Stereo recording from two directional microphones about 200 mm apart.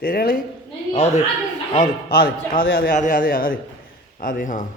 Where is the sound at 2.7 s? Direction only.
45° left (ahead or behind).